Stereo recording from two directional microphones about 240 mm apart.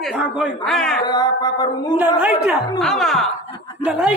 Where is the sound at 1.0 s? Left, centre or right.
Centre.